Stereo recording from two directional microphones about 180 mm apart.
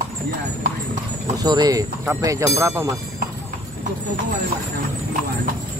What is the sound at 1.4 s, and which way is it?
Speech, 20° right (ahead or behind).